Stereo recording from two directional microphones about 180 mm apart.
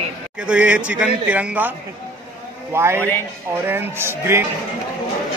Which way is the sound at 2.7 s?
15° right (ahead or behind).